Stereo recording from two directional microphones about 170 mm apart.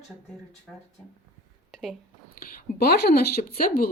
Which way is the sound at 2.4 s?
60° left (ahead or behind).